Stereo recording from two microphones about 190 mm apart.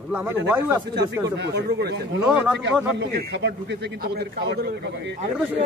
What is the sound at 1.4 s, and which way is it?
A man's voice, 60° right (ahead or behind).